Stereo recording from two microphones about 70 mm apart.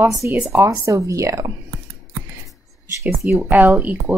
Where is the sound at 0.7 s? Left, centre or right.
Right.